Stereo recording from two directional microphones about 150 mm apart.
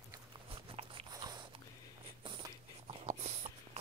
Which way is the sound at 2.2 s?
35° right (ahead or behind).